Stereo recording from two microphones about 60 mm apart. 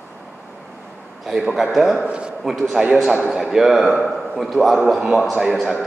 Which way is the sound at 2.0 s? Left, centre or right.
Centre.